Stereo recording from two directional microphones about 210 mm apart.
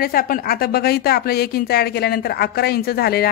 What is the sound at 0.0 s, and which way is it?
A woman's voice, 45° left (ahead or behind).